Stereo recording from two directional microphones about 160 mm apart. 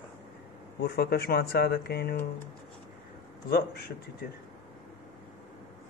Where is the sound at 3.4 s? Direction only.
80° left.